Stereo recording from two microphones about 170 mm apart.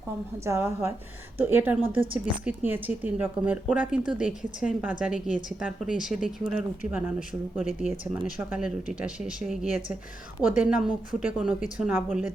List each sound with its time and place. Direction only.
0.4 s speech: 15° right (ahead or behind)